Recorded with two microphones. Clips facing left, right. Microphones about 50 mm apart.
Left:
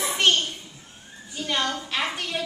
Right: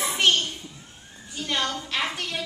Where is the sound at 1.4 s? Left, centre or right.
Centre.